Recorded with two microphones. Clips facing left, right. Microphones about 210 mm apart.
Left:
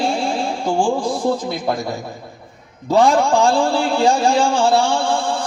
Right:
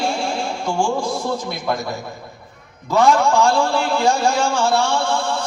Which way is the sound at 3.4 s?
30° left (ahead or behind).